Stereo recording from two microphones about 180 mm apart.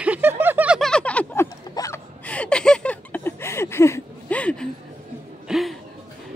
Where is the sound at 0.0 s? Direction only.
10° right (ahead or behind).